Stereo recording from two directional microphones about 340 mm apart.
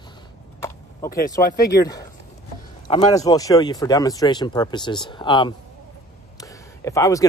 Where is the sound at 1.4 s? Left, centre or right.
Left.